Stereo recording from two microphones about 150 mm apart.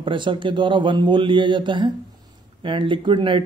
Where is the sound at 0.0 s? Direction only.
35° right (ahead or behind).